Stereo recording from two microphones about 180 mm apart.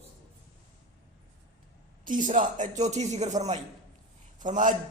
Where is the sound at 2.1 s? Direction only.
45° right (ahead or behind).